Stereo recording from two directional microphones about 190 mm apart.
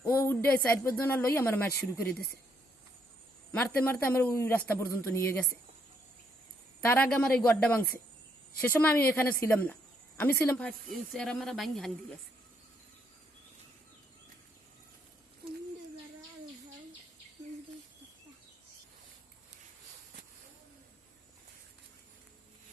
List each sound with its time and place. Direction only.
0.0 s speech: 10° left (ahead or behind)
3.5 s a man's voice: 10° left (ahead or behind)
6.8 s a man's voice: 10° left (ahead or behind)